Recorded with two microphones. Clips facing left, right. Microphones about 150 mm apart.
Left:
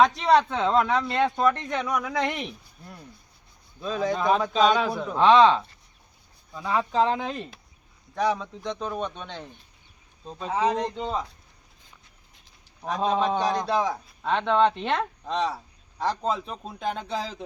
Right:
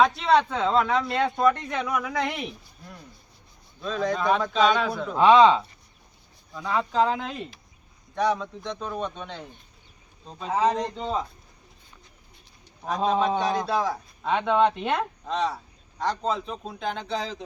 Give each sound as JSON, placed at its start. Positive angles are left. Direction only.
{"t": 0.0, "sound": "a man's voice", "side_deg": 0}
{"t": 3.8, "sound": "a man's voice", "side_deg": 5}
{"t": 5.1, "sound": "speech", "side_deg": -5}
{"t": 6.5, "sound": "a man's voice", "side_deg": 10}
{"t": 12.8, "sound": "a man's voice", "side_deg": 0}